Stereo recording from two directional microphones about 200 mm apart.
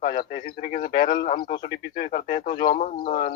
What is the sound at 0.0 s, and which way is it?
Speech, 45° left (ahead or behind).